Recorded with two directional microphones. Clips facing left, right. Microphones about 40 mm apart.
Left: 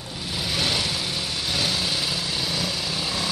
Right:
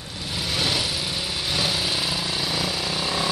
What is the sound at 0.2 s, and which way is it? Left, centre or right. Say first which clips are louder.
Lawn mower: even; centre.